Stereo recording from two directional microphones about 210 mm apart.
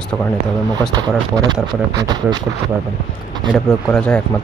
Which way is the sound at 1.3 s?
20° right (ahead or behind).